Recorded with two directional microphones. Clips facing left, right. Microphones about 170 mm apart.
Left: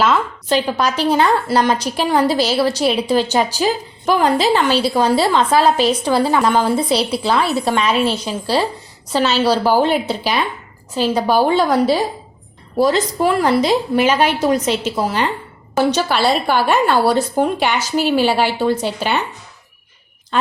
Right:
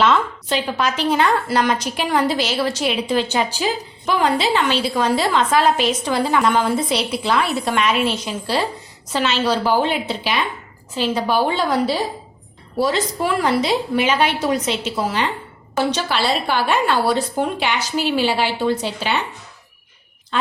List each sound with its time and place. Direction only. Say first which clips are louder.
0.4 s a woman's voice: left 4 dB; 40° left (ahead or behind)
20.3 s a woman's voice: left 3 dB; 45° left (ahead or behind)